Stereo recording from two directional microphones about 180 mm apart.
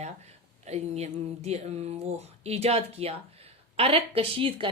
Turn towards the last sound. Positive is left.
turn(degrees=-30)  # may be behind; listen again after turning